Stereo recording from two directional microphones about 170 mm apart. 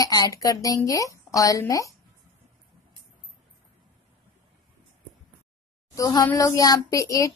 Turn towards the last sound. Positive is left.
turn(degrees=20)  # may be behind; listen again after turning